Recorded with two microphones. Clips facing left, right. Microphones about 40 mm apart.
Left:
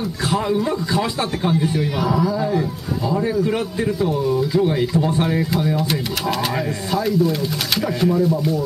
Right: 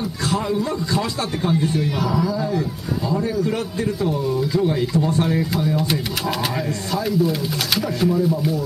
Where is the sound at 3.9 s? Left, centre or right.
Centre.